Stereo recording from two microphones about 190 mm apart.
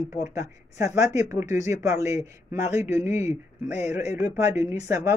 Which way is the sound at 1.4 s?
40° left (ahead or behind).